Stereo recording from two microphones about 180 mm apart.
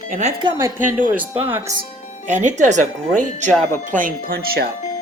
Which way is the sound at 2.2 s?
40° right (ahead or behind).